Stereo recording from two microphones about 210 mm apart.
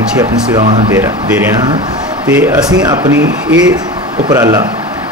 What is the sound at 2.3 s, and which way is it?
Speech, 15° right (ahead or behind).